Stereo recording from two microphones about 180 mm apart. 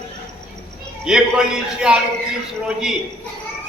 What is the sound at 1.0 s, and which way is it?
Speech, 5° right (ahead or behind).